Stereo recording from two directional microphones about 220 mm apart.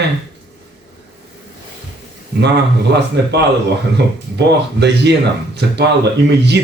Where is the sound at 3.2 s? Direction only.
50° right (ahead or behind).